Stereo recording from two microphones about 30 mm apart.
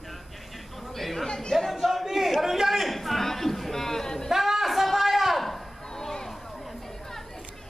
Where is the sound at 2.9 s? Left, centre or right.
Centre.